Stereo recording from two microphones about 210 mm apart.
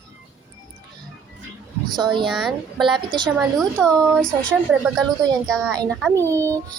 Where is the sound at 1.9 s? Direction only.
20° right (ahead or behind).